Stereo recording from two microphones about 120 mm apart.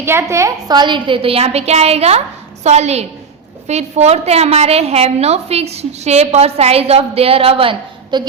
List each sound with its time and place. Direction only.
0.0 s a woman's voice: 20° right (ahead or behind)
0.8 s a woman's voice: 40° right (ahead or behind)